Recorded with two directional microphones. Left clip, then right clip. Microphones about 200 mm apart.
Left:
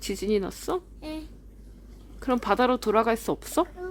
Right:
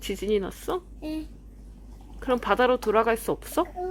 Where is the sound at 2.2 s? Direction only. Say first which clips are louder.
Right 1 dB; 20° left (ahead or behind).